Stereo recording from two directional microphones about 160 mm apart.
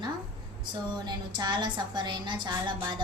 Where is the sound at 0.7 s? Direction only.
25° right (ahead or behind).